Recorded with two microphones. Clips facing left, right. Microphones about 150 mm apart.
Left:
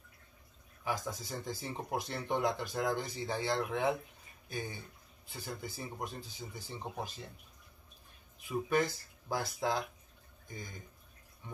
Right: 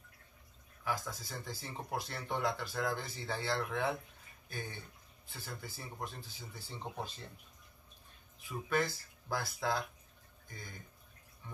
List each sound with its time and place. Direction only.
0.8 s speech: 20° left (ahead or behind)
8.5 s speech: 15° left (ahead or behind)
11.4 s drip: 20° left (ahead or behind)